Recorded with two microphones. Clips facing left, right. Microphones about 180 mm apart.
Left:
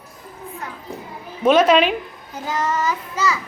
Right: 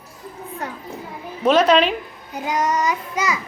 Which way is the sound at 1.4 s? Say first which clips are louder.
Left 1 dB; 5° left (ahead or behind).